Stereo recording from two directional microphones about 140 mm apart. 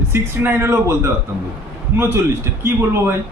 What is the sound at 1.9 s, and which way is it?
Speech, 15° right (ahead or behind).